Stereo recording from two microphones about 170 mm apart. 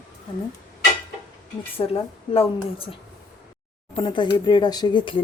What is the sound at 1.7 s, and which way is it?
Speech, 35° left (ahead or behind).